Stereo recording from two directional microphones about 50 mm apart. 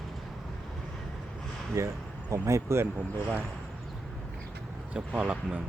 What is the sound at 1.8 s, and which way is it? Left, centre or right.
Speech, right.